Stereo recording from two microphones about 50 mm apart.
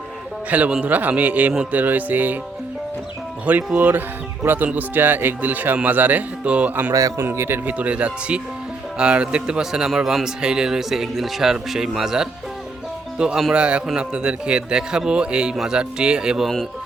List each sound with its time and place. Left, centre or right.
0.5 s cattle: right
0.9 s speech: right
3.8 s speech: right
7.3 s speech: right
7.6 s cattle: right
9.0 s speech: right
13.5 s cattle: right
13.8 s speech: centre